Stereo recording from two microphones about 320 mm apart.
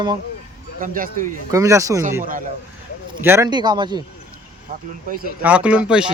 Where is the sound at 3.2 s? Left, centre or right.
Centre.